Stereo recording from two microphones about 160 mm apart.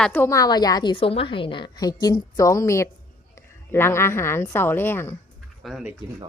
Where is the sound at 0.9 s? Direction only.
35° left (ahead or behind); by 5.2 s 15° left (ahead or behind).